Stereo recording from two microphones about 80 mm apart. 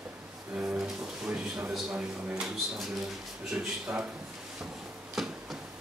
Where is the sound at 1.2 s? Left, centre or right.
Centre.